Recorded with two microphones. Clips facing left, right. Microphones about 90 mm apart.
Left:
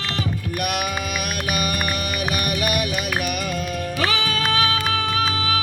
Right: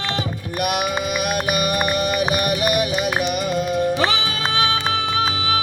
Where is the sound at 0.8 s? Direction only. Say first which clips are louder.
Right 4 dB; 30° right (ahead or behind).